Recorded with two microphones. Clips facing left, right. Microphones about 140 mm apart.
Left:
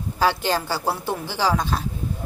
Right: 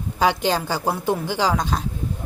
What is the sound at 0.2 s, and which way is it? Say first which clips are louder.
A woman's voice: right 2 dB; 15° right (ahead or behind).